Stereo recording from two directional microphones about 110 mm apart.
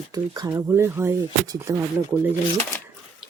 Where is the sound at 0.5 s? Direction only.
20° right (ahead or behind).